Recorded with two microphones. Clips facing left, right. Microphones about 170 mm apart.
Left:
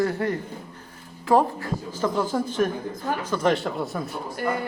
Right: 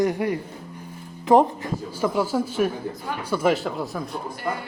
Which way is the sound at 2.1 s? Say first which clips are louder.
Right 1 dB; 10° right (ahead or behind).